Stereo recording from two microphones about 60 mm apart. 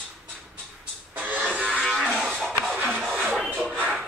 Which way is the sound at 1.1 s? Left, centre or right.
Right.